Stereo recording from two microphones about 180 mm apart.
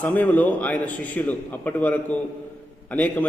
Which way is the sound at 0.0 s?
10° left (ahead or behind).